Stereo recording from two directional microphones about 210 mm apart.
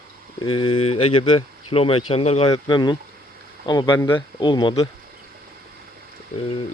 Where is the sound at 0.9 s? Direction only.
90° left.